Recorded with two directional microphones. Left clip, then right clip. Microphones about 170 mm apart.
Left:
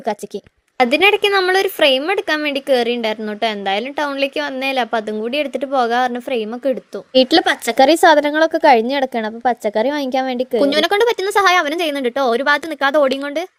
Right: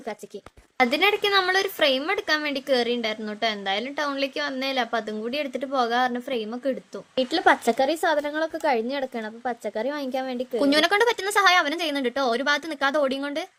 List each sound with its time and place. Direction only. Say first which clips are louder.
0.8 s a woman's voice: left 8 dB; 30° left (ahead or behind)
7.2 s a woman's voice: left 7 dB; 60° left (ahead or behind)
10.6 s a woman's voice: left 5 dB; 30° left (ahead or behind)